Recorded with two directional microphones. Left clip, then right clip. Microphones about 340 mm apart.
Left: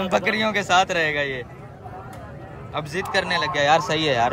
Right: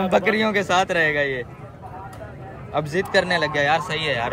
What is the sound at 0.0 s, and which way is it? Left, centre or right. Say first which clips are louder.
A man's voice: right 2 dB; centre.